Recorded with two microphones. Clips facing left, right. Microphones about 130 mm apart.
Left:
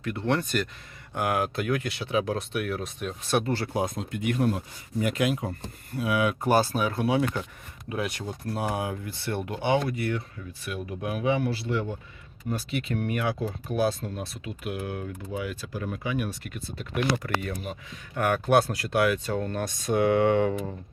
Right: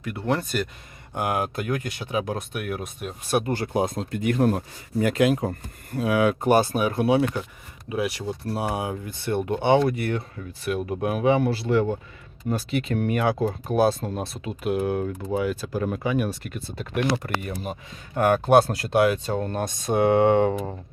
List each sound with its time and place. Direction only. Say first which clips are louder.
0.0 s speech: right 1 dB; 10° right (ahead or behind)
1.1 s speech: right 1 dB; 20° right (ahead or behind)
1.4 s speech: even; 40° right (ahead or behind)
2.7 s speech: even; 10° right (ahead or behind); by 6.5 s 30° right (ahead or behind)
6.5 s speech: right 1 dB; 20° right (ahead or behind)
7.9 s speech: right 4 dB; 10° right (ahead or behind)
8.4 s speech: right 1 dB; 25° right (ahead or behind)
10.0 s speech: right 2 dB; 45° right (ahead or behind)
11.7 s speech: right 11 dB; 90° right
12.5 s speech: right 4 dB; 35° right (ahead or behind)